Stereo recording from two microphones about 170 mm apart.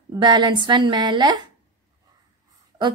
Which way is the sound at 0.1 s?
25° right (ahead or behind).